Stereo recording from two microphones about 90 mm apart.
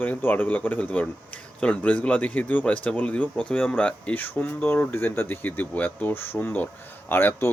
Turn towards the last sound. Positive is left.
turn(degrees=25)  # may be behind; listen again after turning